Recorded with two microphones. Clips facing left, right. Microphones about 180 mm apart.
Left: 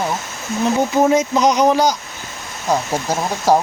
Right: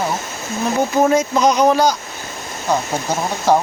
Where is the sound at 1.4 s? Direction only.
20° left (ahead or behind).